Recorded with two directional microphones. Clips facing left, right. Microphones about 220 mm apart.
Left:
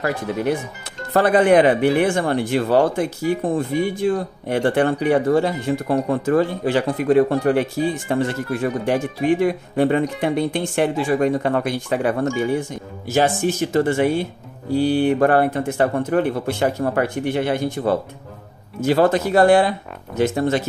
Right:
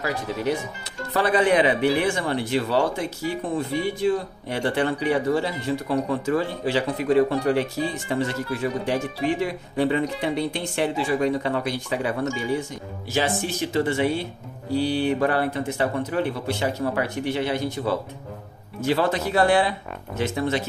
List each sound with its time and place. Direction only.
0.0 s speech: 55° left (ahead or behind)